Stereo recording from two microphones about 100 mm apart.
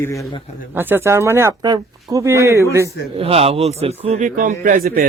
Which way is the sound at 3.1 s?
80° right.